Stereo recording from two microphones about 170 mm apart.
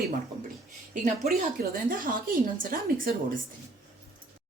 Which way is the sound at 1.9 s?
55° right (ahead or behind).